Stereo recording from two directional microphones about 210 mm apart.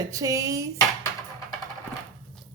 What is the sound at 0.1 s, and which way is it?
Dishes, 15° right (ahead or behind).